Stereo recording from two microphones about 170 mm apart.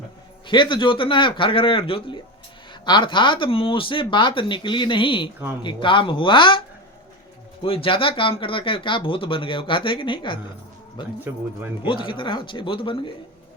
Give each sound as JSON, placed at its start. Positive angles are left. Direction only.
{"t": 0.4, "sound": "speech", "side_deg": 30}
{"t": 7.6, "sound": "speech", "side_deg": 30}